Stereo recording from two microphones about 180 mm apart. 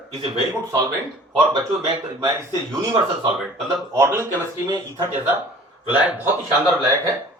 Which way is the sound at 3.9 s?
15° right (ahead or behind).